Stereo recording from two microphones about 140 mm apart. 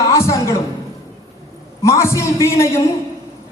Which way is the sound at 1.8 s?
20° left (ahead or behind).